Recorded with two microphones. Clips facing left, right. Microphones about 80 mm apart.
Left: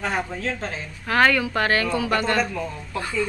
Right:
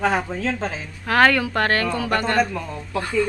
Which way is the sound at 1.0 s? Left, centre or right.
Right.